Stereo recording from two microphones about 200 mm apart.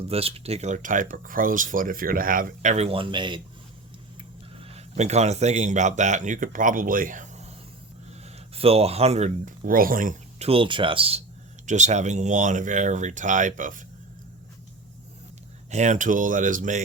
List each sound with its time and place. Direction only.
0.1 s speech: 30° right (ahead or behind)
15.7 s speech: 35° right (ahead or behind)